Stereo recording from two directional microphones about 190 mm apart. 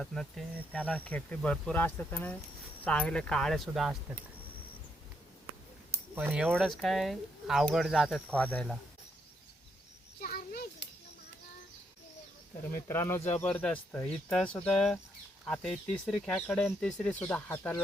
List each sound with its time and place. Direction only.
0.0 s speech: centre (ahead or behind)
5.5 s speech: 10° right (ahead or behind); by 8.8 s 5° left (ahead or behind)
10.2 s a sound: 55° left (ahead or behind)
12.9 s speech: 15° left (ahead or behind)